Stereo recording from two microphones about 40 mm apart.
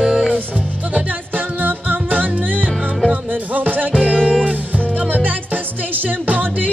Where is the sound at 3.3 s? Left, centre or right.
Right.